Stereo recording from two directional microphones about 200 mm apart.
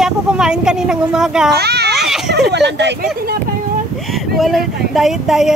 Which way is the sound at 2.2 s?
55° right (ahead or behind).